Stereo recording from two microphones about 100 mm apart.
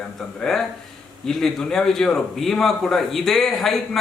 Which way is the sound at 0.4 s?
5° left (ahead or behind).